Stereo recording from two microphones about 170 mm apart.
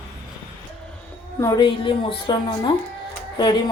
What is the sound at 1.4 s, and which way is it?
Speech, 30° left (ahead or behind).